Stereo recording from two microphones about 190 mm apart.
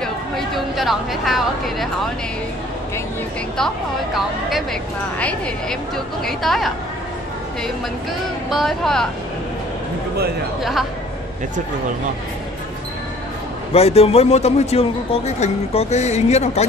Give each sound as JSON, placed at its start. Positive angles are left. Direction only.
{"t": 0.0, "sound": "a sound", "side_deg": 0}
{"t": 3.5, "sound": "a woman's voice", "side_deg": 0}
{"t": 6.2, "sound": "a woman's voice", "side_deg": 0}
{"t": 8.5, "sound": "a woman's voice", "side_deg": 0}
{"t": 10.6, "sound": "a woman's voice", "side_deg": 0}
{"t": 13.7, "sound": "a man's voice", "side_deg": 30}